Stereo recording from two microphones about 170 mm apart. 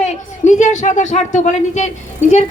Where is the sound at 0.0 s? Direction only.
45° left (ahead or behind).